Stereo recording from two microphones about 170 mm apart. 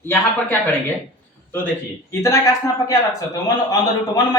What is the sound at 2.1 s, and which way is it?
A man's voice, 20° left (ahead or behind).